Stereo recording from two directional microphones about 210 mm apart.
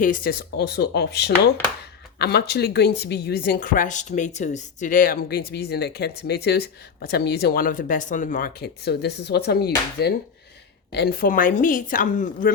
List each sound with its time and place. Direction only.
0.0 s a woman's voice: 40° left (ahead or behind)